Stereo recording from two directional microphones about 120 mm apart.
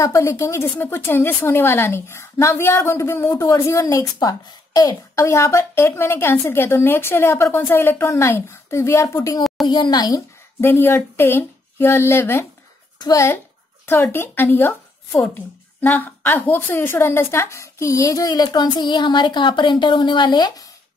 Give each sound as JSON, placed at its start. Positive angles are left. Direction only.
{"t": 0.0, "sound": "a woman's voice", "side_deg": 25}
{"t": 10.6, "sound": "a woman's voice", "side_deg": 20}
{"t": 14.1, "sound": "a woman's voice", "side_deg": 20}